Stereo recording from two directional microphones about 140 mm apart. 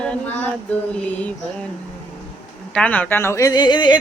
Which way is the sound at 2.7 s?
10° left (ahead or behind).